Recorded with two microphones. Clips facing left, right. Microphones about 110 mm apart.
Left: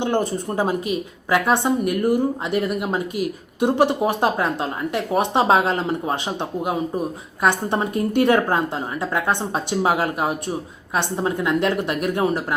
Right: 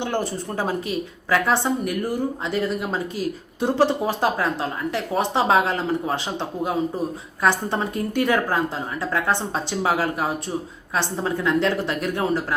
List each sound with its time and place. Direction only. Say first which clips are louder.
0.0 s a woman's voice: left 4 dB; 15° left (ahead or behind)